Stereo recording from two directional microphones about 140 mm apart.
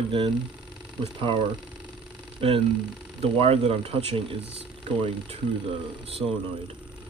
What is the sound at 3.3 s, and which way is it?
Speech, 40° right (ahead or behind).